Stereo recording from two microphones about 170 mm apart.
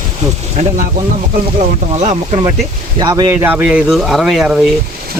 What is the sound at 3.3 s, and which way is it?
Speech, 10° right (ahead or behind).